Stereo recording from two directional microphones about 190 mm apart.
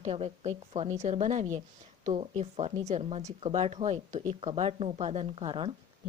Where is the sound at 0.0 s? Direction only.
35° right (ahead or behind).